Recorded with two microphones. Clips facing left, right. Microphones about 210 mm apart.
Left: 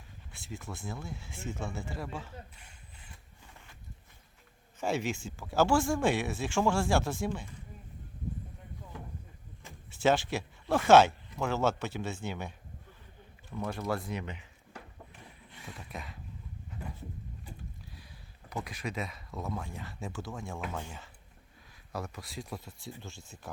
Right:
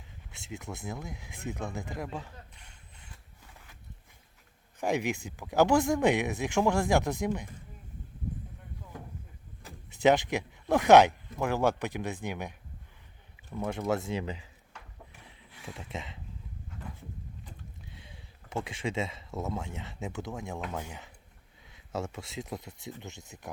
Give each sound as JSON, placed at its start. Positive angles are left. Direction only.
{"t": 0.3, "sound": "speech", "side_deg": -20}
{"t": 2.6, "sound": "a sound", "side_deg": 5}
{"t": 4.8, "sound": "speech", "side_deg": -15}
{"t": 10.0, "sound": "speech", "side_deg": -20}
{"t": 13.6, "sound": "speech", "side_deg": -20}
{"t": 15.4, "sound": "a sound", "side_deg": 0}
{"t": 15.8, "sound": "speech", "side_deg": -25}
{"t": 17.9, "sound": "speech", "side_deg": -25}
{"t": 21.7, "sound": "speech", "side_deg": -25}